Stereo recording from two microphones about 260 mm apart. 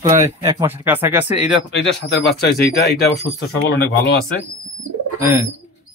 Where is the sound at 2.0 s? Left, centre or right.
Left.